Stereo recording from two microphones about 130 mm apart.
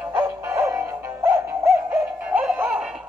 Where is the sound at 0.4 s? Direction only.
20° right (ahead or behind).